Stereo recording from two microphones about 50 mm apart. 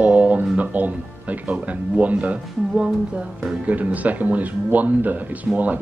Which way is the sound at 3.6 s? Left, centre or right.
Right.